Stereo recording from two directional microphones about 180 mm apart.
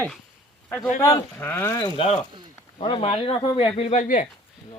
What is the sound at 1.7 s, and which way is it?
Speech, 25° left (ahead or behind).